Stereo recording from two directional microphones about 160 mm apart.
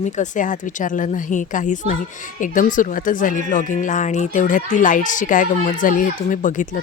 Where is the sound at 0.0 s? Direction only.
50° left (ahead or behind).